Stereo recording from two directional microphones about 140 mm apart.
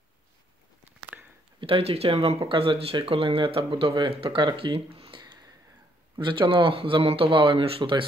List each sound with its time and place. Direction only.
1.6 s speech: 45° right (ahead or behind)